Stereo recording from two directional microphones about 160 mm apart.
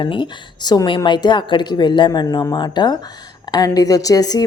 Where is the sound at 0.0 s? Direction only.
30° left (ahead or behind).